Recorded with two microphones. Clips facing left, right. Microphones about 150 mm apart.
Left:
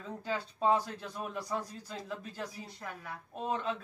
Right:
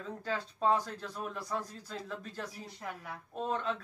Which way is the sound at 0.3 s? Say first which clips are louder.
Left 1 dB; 5° left (ahead or behind).